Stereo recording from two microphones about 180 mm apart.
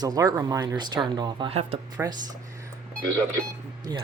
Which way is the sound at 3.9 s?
20° right (ahead or behind).